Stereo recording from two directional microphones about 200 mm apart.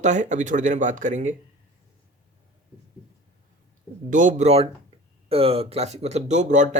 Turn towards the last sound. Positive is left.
turn(degrees=-35)  # may be behind; listen again after turning